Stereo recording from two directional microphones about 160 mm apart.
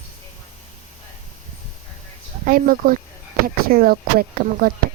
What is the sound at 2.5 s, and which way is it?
Speech, 60° right (ahead or behind).